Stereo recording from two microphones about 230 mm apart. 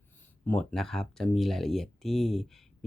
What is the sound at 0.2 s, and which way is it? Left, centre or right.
Speech, centre.